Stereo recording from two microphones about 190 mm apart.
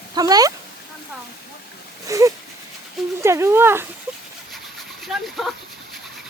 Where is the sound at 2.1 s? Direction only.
15° right (ahead or behind).